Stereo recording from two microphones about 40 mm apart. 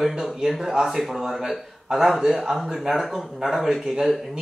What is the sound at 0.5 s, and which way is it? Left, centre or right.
Speech, centre.